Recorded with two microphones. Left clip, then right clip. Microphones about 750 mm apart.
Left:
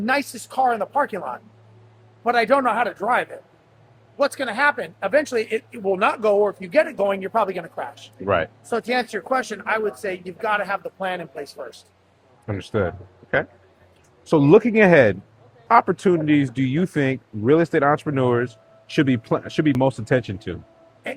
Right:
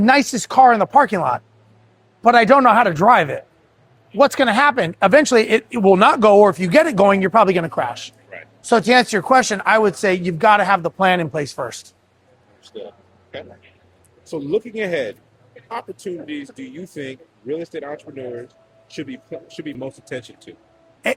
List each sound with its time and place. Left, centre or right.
0.0 s speech: right
2.2 s speech: right
14.3 s speech: left